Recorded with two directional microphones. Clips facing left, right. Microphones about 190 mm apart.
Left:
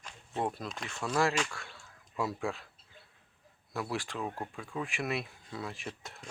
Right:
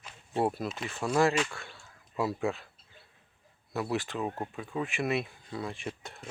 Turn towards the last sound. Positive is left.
turn(degrees=-5)  # may be behind; listen again after turning